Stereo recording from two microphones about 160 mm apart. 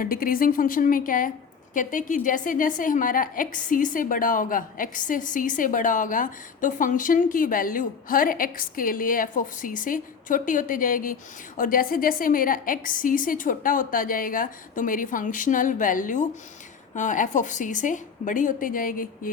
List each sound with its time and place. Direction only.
0.0 s a woman's voice: 65° left (ahead or behind)